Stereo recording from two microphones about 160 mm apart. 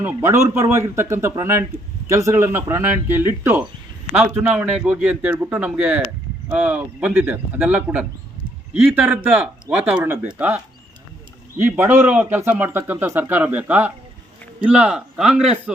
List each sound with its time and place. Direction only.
0.0 s a man's voice: 15° right (ahead or behind)